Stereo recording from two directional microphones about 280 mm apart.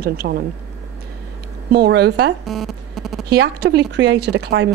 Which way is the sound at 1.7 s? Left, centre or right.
Right.